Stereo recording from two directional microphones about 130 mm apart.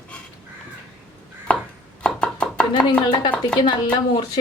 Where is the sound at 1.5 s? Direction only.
5° left (ahead or behind).